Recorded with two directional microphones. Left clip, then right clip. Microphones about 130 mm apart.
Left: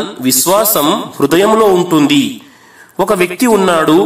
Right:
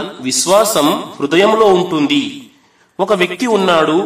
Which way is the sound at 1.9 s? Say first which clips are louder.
Left 4 dB; 40° left (ahead or behind).